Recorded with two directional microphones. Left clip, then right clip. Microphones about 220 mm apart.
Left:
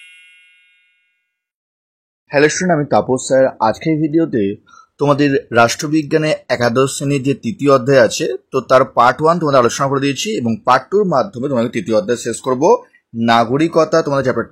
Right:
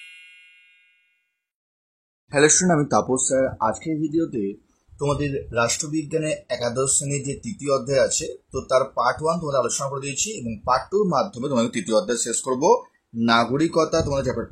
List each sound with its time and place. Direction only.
0.0 s music: centre (ahead or behind)
2.2 s speech: 10° left (ahead or behind)